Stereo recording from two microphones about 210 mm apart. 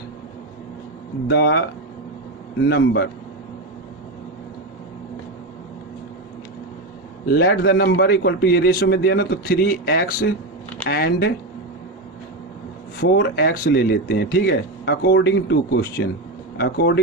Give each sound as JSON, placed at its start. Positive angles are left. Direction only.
{"t": 1.3, "sound": "a man's voice", "side_deg": 50}
{"t": 2.6, "sound": "a man's voice", "side_deg": 50}
{"t": 7.3, "sound": "a man's voice", "side_deg": 45}
{"t": 13.0, "sound": "a man's voice", "side_deg": 50}